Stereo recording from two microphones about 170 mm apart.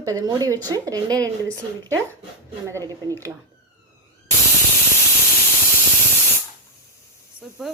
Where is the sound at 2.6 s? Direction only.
20° right (ahead or behind).